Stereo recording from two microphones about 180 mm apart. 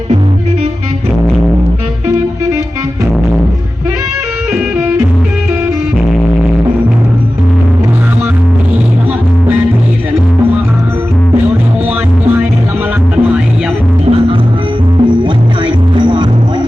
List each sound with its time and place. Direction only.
4.5 s music: 10° right (ahead or behind)
14.0 s music: 35° right (ahead or behind)